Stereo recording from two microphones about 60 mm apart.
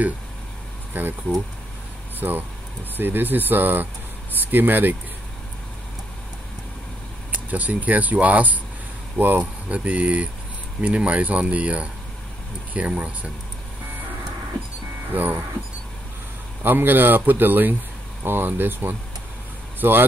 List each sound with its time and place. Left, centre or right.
1.0 s speech: right
2.1 s speech: right
7.3 s speech: right
15.0 s speech: right
16.6 s speech: right